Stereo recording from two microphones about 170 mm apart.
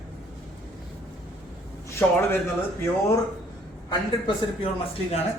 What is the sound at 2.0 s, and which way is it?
Speech, 10° left (ahead or behind).